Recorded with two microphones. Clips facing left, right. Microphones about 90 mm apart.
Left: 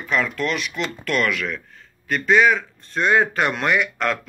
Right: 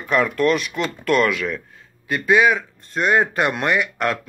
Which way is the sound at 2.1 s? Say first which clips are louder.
Even; 10° right (ahead or behind).